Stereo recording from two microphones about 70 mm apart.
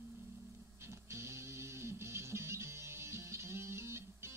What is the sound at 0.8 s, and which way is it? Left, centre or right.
Music, right.